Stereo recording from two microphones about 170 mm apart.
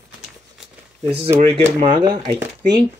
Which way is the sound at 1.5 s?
30° right (ahead or behind).